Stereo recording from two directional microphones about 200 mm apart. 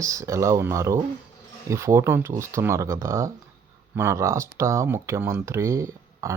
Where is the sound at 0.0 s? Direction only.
15° right (ahead or behind).